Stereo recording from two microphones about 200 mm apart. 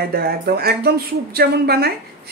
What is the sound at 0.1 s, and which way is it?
Speech, 50° right (ahead or behind).